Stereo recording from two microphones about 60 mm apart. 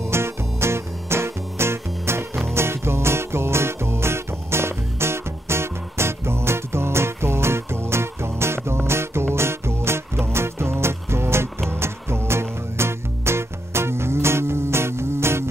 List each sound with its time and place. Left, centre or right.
0.1 s music: right